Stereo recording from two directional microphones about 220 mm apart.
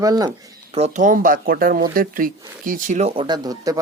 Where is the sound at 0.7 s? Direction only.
30° right (ahead or behind).